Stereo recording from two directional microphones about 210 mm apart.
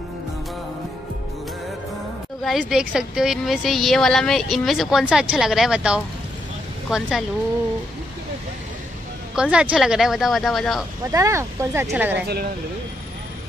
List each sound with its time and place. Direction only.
2.4 s a woman's voice: centre (ahead or behind)
9.3 s a woman's voice: 5° right (ahead or behind)
11.1 s speech: 15° right (ahead or behind)